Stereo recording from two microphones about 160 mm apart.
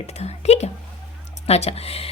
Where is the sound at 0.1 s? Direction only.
40° left (ahead or behind).